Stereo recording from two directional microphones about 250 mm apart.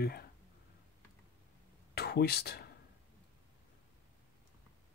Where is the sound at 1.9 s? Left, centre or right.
Left.